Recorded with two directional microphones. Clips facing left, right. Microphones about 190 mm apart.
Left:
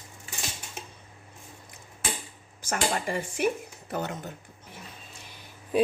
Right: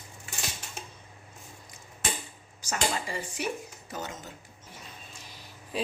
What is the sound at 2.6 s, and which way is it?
Speech, 50° left (ahead or behind).